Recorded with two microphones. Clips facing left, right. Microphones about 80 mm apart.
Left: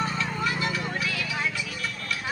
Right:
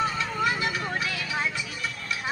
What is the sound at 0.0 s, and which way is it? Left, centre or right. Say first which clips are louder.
Vehicle: right 2 dB; centre.